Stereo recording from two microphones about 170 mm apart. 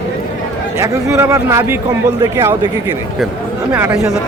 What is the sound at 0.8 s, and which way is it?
A man's voice, 15° right (ahead or behind).